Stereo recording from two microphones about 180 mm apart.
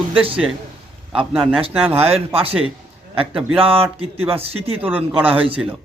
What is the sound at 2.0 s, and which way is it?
A man's voice, 35° right (ahead or behind).